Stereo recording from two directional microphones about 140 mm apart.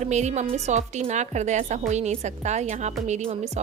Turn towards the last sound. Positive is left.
turn(degrees=-55)  # may be behind; listen again after turning